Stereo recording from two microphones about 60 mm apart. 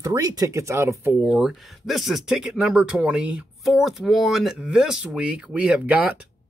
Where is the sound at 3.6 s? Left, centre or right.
Centre.